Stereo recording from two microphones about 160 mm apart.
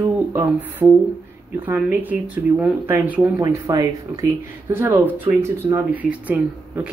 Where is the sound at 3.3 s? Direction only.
25° right (ahead or behind).